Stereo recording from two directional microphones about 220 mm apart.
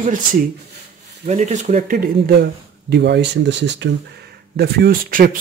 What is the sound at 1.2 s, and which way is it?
Speech, 30° right (ahead or behind).